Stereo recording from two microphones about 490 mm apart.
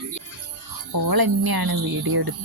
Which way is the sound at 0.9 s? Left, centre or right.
Right.